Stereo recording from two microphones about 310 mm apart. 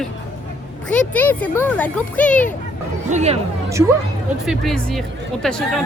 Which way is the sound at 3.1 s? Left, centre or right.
Right.